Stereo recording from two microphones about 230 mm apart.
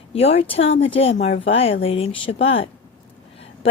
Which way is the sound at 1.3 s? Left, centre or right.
Left.